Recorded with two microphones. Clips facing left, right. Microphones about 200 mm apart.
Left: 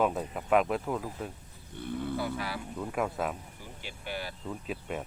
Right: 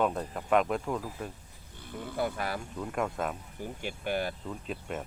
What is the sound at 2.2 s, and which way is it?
Speech, 50° right (ahead or behind).